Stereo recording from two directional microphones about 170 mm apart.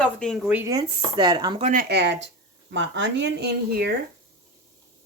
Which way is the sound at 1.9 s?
90° right.